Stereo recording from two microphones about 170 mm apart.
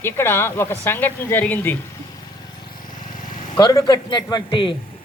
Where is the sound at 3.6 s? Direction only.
25° left (ahead or behind).